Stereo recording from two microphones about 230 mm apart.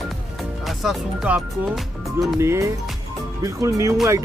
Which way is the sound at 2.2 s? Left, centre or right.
Centre.